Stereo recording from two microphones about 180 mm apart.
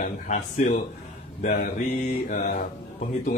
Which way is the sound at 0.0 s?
50° left (ahead or behind).